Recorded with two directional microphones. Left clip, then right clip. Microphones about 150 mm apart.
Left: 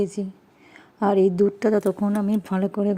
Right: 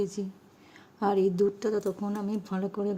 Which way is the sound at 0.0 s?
25° left (ahead or behind).